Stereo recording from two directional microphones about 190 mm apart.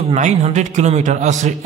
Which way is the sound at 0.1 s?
40° right (ahead or behind).